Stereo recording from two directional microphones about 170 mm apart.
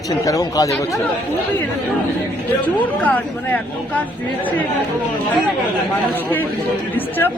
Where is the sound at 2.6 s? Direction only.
10° left (ahead or behind).